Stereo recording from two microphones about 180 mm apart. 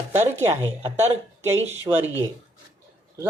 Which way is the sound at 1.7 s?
10° right (ahead or behind).